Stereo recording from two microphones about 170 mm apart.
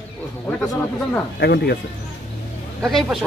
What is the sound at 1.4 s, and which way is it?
Speech, 75° left (ahead or behind).